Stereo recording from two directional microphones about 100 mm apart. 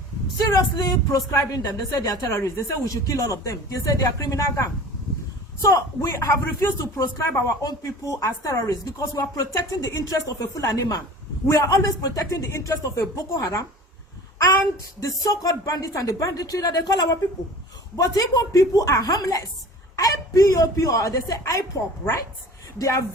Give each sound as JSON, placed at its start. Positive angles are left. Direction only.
{"t": 0.3, "sound": "speech", "side_deg": 40}
{"t": 7.4, "sound": "speech", "side_deg": 35}
{"t": 15.0, "sound": "speech", "side_deg": 35}
{"t": 22.8, "sound": "speech", "side_deg": 30}